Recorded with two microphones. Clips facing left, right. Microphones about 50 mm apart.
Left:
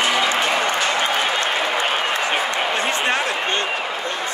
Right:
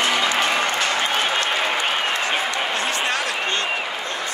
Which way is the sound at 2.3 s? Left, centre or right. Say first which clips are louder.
Left 2 dB; left.